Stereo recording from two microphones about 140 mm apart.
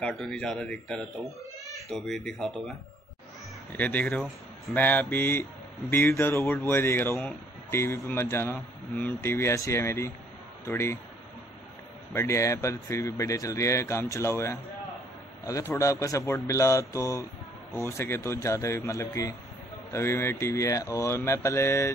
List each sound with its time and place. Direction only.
0.0 s speech: 5° left (ahead or behind)
3.7 s speech: 10° left (ahead or behind)
12.1 s speech: 20° left (ahead or behind)
15.7 s speech: 20° left (ahead or behind)